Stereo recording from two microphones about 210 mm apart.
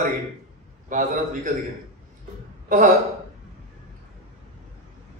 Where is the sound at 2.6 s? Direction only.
40° right (ahead or behind).